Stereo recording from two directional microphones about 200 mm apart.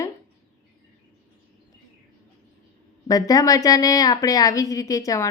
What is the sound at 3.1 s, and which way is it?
Speech, 20° left (ahead or behind).